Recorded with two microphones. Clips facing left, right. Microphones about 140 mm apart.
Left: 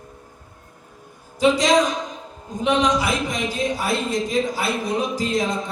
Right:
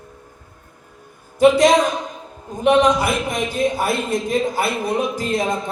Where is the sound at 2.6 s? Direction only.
55° right (ahead or behind).